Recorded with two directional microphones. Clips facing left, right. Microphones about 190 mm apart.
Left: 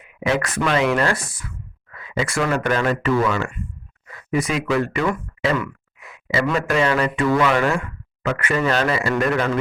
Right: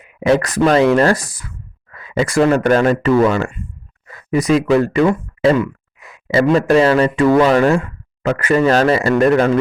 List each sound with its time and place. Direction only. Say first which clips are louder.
0.0 s speech: right 7 dB; 40° right (ahead or behind)